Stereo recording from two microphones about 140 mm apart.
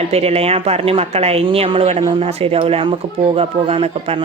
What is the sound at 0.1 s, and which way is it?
A man's voice, 45° right (ahead or behind).